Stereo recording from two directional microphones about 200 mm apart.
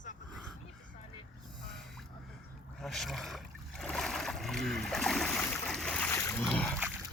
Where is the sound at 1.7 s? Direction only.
Centre (ahead or behind).